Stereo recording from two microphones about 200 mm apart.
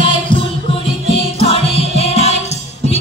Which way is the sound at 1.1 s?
30° left (ahead or behind).